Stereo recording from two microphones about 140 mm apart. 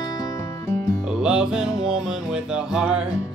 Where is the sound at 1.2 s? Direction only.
5° right (ahead or behind).